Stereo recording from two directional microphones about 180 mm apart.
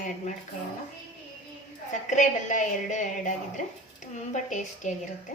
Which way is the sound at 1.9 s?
45° left (ahead or behind).